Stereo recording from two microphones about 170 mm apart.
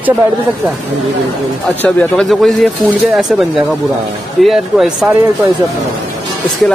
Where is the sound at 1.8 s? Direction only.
5° left (ahead or behind).